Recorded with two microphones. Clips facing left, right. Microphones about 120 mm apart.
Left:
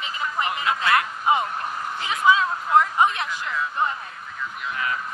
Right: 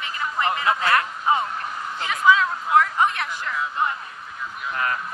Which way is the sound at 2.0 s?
20° left (ahead or behind).